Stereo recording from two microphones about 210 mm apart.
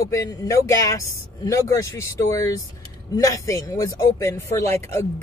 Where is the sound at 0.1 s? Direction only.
15° left (ahead or behind).